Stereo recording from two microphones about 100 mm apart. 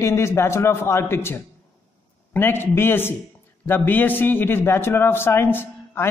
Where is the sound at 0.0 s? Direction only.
30° left (ahead or behind).